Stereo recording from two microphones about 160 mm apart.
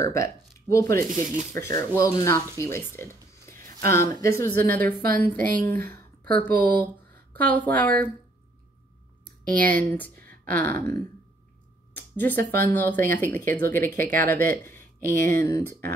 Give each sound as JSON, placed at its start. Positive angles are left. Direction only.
{"t": 0.0, "sound": "speech", "side_deg": 20}
{"t": 9.8, "sound": "speech", "side_deg": 10}